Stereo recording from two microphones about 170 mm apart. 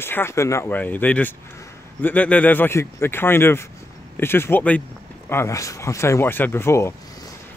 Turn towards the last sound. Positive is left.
turn(degrees=15)  # may be behind; listen again after turning